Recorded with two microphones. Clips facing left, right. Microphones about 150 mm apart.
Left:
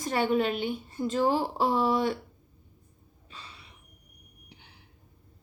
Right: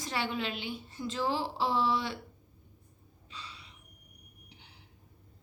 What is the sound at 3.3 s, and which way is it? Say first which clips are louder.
Gasp: even; 50° left (ahead or behind).